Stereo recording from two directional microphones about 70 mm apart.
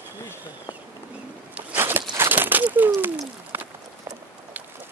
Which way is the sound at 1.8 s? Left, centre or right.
Right.